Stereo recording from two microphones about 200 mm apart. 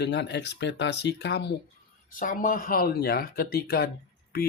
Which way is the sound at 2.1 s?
40° left (ahead or behind).